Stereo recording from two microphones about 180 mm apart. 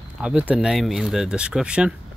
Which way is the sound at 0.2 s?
5° right (ahead or behind).